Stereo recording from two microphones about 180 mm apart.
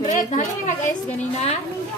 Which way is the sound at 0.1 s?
40° left (ahead or behind).